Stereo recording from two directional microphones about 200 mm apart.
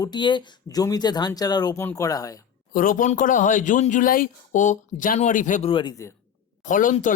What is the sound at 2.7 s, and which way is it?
Speech, 45° left (ahead or behind).